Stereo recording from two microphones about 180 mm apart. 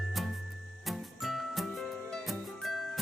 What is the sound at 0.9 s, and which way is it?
Music, centre (ahead or behind).